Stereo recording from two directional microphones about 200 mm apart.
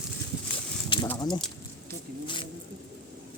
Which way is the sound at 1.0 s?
15° left (ahead or behind).